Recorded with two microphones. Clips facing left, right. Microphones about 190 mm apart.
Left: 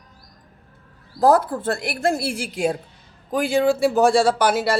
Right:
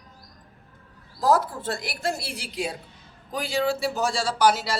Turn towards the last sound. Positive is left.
turn(degrees=55)  # may be behind; listen again after turning